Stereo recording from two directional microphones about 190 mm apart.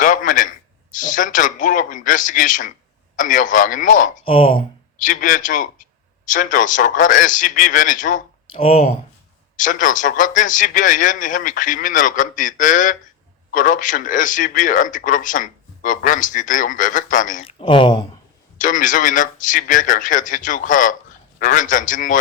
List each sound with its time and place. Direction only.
0.0 s a sound: 45° left (ahead or behind)
3.2 s a man's voice: 45° left (ahead or behind)
4.3 s speech: 30° left (ahead or behind)
4.9 s a man's voice: 45° left (ahead or behind)
8.5 s speech: 30° left (ahead or behind)
9.6 s a man's voice: 45° left (ahead or behind)
17.4 s speech: 25° left (ahead or behind)
18.5 s a man's voice: 45° left (ahead or behind)